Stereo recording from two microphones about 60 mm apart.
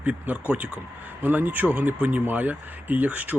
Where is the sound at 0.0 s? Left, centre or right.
Right.